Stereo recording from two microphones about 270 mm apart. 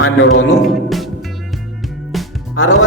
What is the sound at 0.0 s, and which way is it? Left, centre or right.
Speech, left.